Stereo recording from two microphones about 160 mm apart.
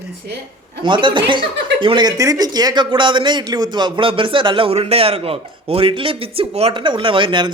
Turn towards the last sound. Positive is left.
turn(degrees=-30)  # may be behind; listen again after turning